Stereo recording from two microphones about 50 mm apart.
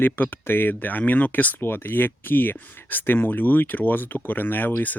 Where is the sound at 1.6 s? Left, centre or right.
Left.